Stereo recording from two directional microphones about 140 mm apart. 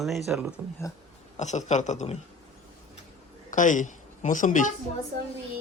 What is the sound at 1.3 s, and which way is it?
Speech, 55° left (ahead or behind).